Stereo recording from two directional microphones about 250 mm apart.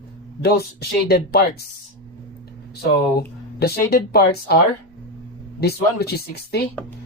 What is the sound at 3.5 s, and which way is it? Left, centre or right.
Speech, left.